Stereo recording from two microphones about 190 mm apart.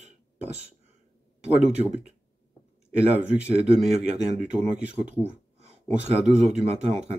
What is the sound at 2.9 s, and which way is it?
Speech, 5° right (ahead or behind).